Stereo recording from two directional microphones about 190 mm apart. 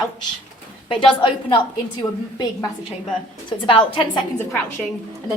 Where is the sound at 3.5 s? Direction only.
25° left (ahead or behind).